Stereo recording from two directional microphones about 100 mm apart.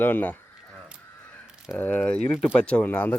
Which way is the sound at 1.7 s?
10° left (ahead or behind).